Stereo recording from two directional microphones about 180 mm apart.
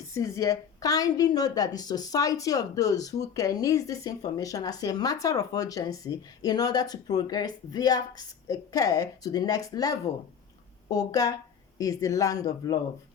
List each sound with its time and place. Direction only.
0.1 s a woman's voice: 15° left (ahead or behind)